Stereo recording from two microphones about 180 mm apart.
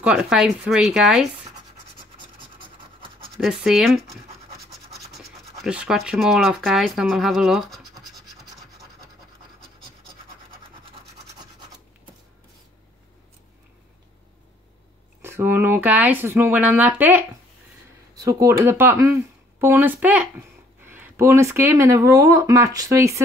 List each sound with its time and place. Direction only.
0.0 s speech: 5° right (ahead or behind)
3.3 s speech: centre (ahead or behind)
5.2 s speech: 5° right (ahead or behind)
15.2 s speech: 15° right (ahead or behind)